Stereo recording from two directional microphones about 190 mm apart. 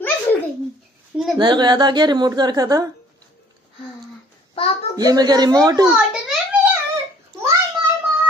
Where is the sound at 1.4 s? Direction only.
25° right (ahead or behind).